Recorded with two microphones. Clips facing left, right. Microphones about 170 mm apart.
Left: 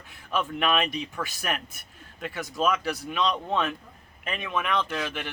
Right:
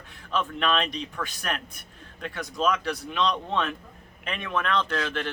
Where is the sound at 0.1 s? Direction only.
10° left (ahead or behind).